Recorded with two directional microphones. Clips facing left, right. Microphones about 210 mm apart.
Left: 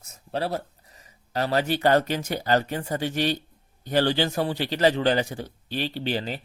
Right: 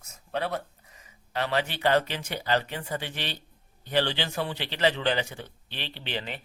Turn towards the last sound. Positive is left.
turn(degrees=40)  # may be behind; listen again after turning